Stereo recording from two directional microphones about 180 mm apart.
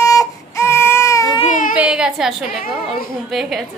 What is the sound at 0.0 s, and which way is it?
Baby cry, 15° left (ahead or behind).